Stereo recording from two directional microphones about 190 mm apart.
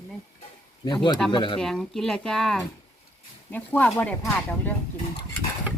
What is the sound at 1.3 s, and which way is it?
Speech, 25° left (ahead or behind).